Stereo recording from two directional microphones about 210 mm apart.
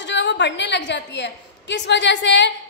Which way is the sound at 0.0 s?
55° left (ahead or behind).